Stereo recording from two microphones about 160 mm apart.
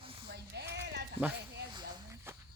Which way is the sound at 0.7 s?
90° right.